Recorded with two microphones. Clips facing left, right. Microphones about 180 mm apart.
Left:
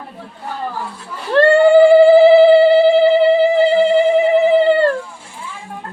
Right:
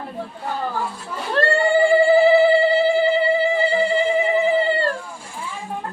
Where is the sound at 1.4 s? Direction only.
65° left (ahead or behind).